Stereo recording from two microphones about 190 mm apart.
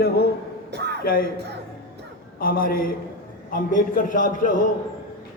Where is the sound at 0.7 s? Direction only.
60° right (ahead or behind).